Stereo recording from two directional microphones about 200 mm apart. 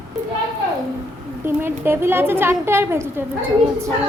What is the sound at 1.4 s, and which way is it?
A woman's voice, 10° right (ahead or behind).